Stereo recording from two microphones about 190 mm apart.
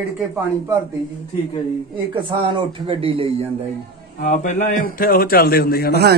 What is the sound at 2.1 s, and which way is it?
Speech, 25° right (ahead or behind).